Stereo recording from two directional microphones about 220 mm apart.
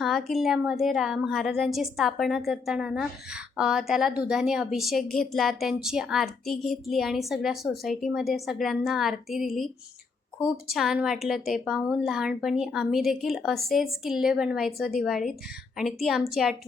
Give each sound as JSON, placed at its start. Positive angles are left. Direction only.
{"t": 0.0, "sound": "a woman's voice", "side_deg": 0}
{"t": 10.7, "sound": "a woman's voice", "side_deg": 0}